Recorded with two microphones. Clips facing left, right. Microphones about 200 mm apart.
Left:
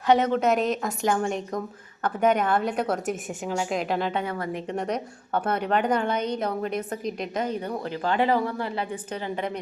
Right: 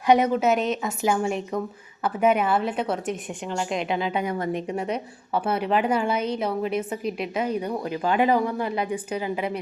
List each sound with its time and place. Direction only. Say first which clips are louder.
0.1 s a woman's voice: right 1 dB; 10° right (ahead or behind)
4.1 s a woman's voice: right 3 dB; 15° right (ahead or behind)
4.7 s a woman's voice: right 1 dB; 5° right (ahead or behind)